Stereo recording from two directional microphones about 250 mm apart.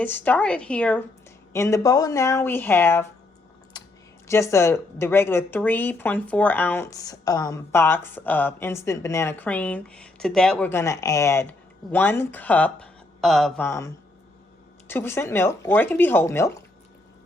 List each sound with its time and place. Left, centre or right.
0.0 s a woman's voice: centre
3.7 s typing: centre
4.3 s speech: centre